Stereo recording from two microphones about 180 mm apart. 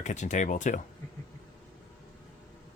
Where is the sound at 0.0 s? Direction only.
40° left (ahead or behind).